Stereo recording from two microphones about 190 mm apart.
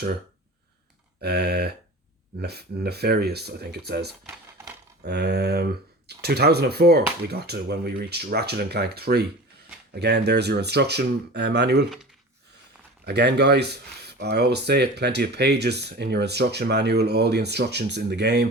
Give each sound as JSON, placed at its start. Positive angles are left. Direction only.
{"t": 1.2, "sound": "speech", "side_deg": -60}
{"t": 13.1, "sound": "speech", "side_deg": -60}